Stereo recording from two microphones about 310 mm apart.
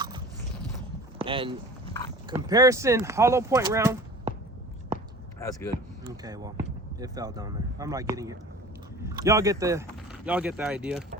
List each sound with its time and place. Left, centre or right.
1.2 s speech: centre
5.4 s speech: centre
6.2 s speech: centre